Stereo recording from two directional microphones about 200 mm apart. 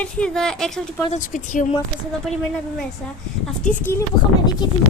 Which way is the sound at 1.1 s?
40° left (ahead or behind).